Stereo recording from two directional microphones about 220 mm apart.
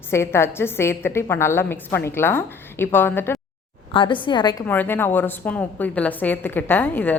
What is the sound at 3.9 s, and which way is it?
A woman's voice, 20° left (ahead or behind).